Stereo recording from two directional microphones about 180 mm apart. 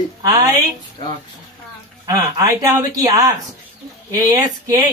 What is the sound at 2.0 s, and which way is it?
Speech, 20° right (ahead or behind).